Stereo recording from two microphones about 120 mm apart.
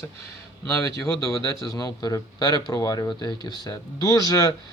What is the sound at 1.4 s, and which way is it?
Speech, 25° left (ahead or behind).